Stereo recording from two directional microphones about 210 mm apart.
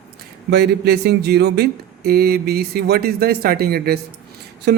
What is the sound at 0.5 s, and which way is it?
Speech, 50° right (ahead or behind).